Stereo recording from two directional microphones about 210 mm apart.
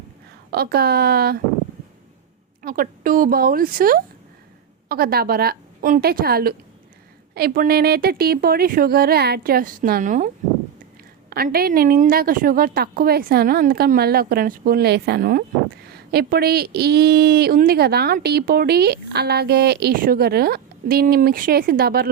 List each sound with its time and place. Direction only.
0.5 s speech: 50° right (ahead or behind)
2.6 s speech: 40° right (ahead or behind)
11.3 s speech: 45° right (ahead or behind)